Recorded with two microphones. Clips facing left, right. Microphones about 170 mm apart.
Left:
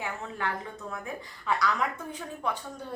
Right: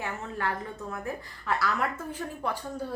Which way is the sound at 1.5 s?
5° right (ahead or behind).